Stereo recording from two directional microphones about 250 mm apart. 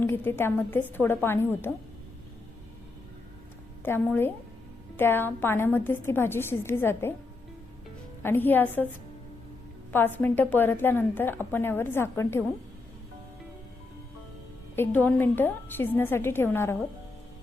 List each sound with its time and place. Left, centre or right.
0.0 s a woman's voice: centre
3.8 s a woman's voice: centre
8.2 s a woman's voice: centre
9.9 s a woman's voice: centre
14.8 s a woman's voice: centre